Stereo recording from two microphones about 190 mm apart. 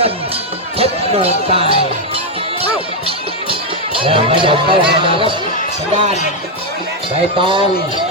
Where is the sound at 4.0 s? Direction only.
30° right (ahead or behind).